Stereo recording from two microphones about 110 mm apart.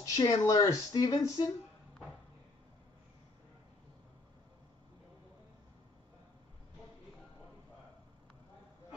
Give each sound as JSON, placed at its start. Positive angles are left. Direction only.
{"t": 0.0, "sound": "speech", "side_deg": 35}